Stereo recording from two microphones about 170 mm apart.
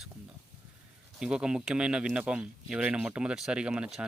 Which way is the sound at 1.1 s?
5° right (ahead or behind).